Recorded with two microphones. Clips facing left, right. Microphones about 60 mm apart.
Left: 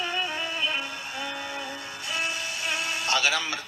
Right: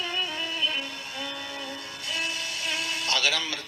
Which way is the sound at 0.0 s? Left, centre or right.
Left.